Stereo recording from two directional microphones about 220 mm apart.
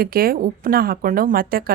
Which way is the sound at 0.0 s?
40° right (ahead or behind).